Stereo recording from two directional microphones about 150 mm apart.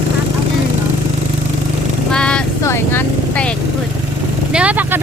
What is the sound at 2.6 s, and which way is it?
Vehicle, 15° left (ahead or behind).